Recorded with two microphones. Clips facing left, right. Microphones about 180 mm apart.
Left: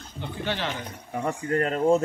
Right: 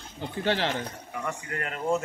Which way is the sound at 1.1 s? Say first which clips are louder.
Left 10 dB; 35° left (ahead or behind).